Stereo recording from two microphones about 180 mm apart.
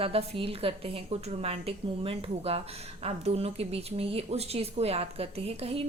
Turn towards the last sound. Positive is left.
turn(degrees=-35)  # may be behind; listen again after turning